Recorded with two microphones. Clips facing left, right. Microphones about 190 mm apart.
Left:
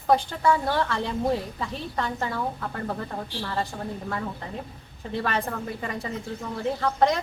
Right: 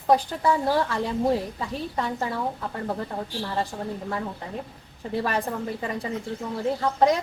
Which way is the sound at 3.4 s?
15° right (ahead or behind).